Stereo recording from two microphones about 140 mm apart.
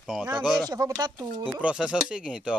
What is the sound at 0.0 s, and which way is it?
Speech, centre (ahead or behind).